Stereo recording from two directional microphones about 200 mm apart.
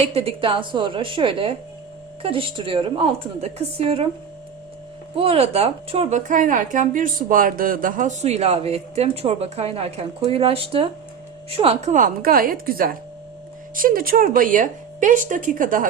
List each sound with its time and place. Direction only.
0.0 s a woman's voice: 30° right (ahead or behind)
5.1 s a woman's voice: 30° right (ahead or behind)